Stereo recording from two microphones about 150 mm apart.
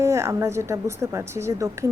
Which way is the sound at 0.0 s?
20° right (ahead or behind).